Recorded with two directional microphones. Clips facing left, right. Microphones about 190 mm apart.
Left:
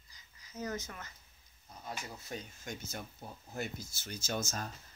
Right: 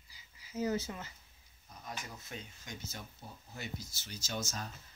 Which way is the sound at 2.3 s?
45° left (ahead or behind).